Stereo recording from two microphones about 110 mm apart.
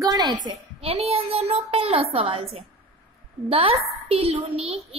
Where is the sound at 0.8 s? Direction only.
60° right (ahead or behind).